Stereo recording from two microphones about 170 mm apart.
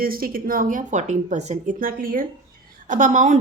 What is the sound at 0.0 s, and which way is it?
Speech, 60° right (ahead or behind).